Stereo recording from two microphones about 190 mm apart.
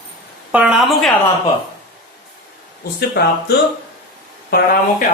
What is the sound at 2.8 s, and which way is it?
Speech, 55° left (ahead or behind).